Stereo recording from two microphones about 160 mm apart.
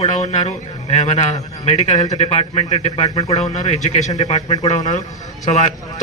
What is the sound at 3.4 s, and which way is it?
Speech, 45° left (ahead or behind).